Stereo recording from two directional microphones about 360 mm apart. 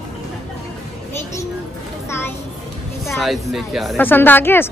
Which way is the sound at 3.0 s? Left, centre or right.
Centre.